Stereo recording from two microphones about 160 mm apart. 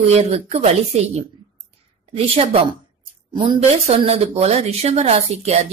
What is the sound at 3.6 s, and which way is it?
Speech, 40° right (ahead or behind).